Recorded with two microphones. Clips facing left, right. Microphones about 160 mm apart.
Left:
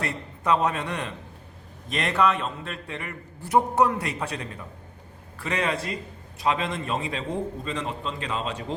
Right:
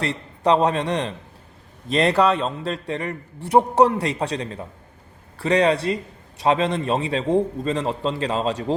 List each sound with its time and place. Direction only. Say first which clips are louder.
0.0 s a man's voice: right 7 dB; 30° right (ahead or behind)